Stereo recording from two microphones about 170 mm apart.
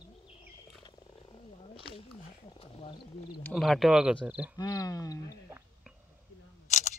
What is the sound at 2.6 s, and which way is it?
Speech, 30° left (ahead or behind).